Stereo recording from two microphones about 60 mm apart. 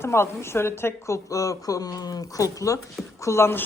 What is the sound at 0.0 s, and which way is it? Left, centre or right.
A woman's voice, left.